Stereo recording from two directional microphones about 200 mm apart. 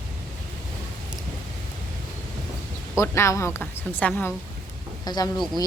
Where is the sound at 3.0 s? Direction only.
15° left (ahead or behind).